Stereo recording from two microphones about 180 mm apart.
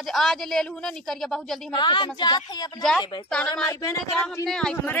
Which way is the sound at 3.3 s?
5° left (ahead or behind).